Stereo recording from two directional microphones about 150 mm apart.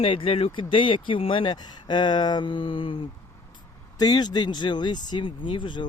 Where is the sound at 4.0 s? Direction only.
25° left (ahead or behind).